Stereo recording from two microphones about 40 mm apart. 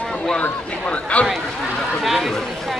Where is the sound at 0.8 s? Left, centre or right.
Left.